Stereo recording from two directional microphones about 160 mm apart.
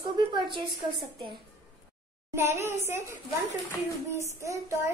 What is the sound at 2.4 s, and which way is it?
Speech, 15° right (ahead or behind).